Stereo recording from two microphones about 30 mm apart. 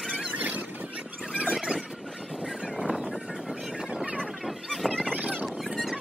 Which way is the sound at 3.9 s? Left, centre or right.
Right.